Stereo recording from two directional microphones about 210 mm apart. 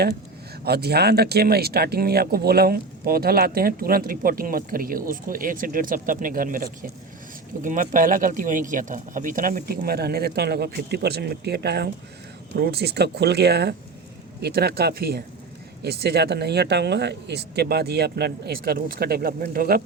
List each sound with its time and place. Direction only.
0.6 s speech: 50° right (ahead or behind)